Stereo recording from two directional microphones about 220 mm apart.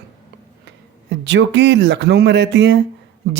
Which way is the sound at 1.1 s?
55° right (ahead or behind).